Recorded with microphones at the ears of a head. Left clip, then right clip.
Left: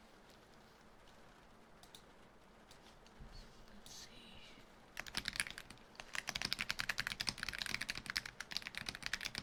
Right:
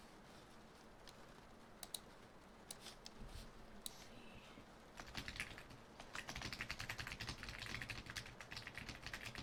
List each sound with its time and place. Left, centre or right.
4.9 s typing: left